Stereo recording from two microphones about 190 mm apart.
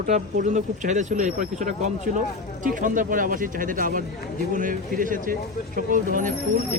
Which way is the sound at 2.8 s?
45° right (ahead or behind).